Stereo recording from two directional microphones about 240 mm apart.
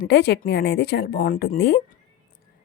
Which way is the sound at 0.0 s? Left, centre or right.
Left.